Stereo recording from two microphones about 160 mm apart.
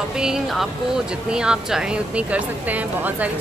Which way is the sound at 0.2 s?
5° right (ahead or behind).